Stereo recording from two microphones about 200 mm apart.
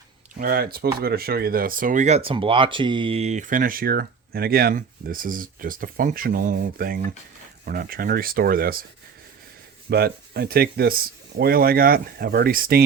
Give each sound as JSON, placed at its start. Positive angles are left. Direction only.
{"t": 0.3, "sound": "speech", "side_deg": -45}
{"t": 9.9, "sound": "speech", "side_deg": -50}